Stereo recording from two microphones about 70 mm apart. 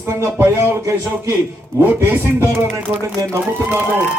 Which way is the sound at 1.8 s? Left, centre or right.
Right.